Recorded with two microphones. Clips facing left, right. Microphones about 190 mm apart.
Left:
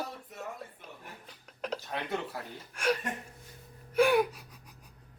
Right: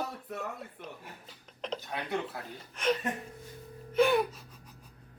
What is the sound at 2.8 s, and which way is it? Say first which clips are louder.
Speech: even; 10° left (ahead or behind).